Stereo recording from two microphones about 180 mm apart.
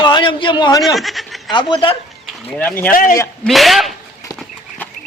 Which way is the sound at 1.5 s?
25° left (ahead or behind).